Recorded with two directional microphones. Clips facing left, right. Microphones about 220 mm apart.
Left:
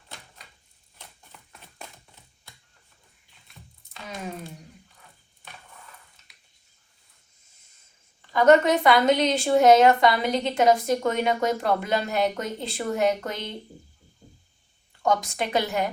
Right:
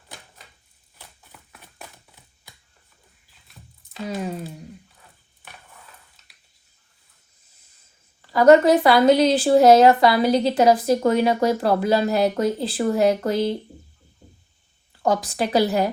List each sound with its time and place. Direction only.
0.9 s a sound: 5° right (ahead or behind)
3.2 s music: centre (ahead or behind)
8.2 s speech: 35° right (ahead or behind)
15.0 s speech: 35° right (ahead or behind)